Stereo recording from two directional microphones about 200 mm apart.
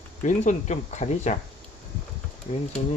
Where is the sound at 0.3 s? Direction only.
35° left (ahead or behind).